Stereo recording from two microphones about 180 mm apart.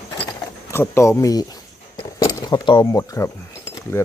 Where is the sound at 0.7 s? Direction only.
15° left (ahead or behind).